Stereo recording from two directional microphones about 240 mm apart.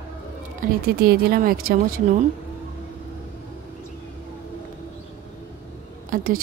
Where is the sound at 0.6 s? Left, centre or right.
Right.